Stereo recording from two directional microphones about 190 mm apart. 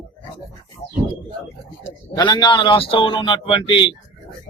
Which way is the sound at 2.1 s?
25° left (ahead or behind).